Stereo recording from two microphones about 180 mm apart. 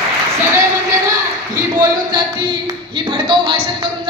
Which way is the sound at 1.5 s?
20° right (ahead or behind).